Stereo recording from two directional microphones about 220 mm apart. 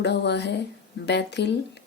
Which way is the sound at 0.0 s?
50° left (ahead or behind).